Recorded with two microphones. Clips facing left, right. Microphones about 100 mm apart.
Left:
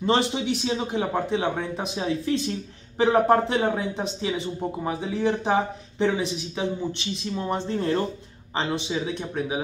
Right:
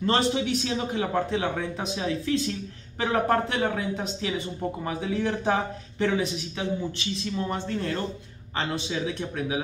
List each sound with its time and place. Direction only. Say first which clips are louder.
0.0 s a man's voice: left 1 dB; 15° left (ahead or behind)